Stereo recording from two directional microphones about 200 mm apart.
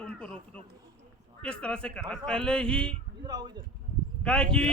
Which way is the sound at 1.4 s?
5° left (ahead or behind).